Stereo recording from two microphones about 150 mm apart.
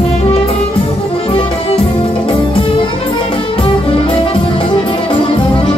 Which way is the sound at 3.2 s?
35° left (ahead or behind).